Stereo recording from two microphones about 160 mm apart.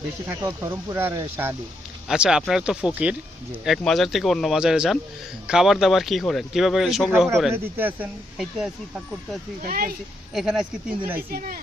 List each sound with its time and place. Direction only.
0.3 s speech: 15° right (ahead or behind)
7.5 s speech: 10° right (ahead or behind)
9.6 s speech: 65° right (ahead or behind)
10.3 s speech: 5° right (ahead or behind)
11.2 s speech: 70° right (ahead or behind)